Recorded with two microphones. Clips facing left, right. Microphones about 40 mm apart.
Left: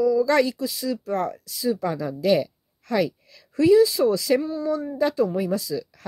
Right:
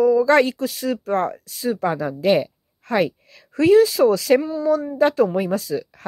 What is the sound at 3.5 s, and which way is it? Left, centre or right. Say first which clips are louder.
Speech: right 2 dB; right.